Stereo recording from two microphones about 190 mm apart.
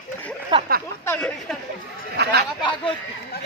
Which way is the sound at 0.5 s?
25° right (ahead or behind).